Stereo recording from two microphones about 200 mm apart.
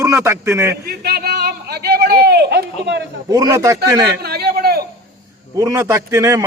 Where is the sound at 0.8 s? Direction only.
50° right (ahead or behind).